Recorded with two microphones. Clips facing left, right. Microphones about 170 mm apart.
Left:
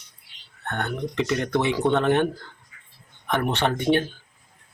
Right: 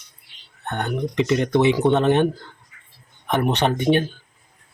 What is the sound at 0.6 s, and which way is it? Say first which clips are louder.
Speech: right 3 dB; 20° right (ahead or behind).